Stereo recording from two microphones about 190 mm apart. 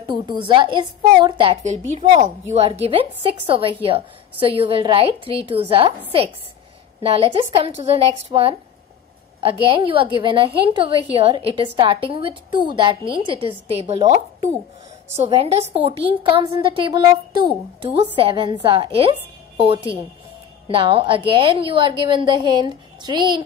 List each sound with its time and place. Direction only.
0.0 s a woman's voice: 25° right (ahead or behind)